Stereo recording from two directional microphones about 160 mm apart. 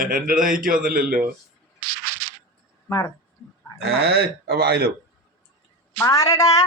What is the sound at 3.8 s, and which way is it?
Speech, 80° right.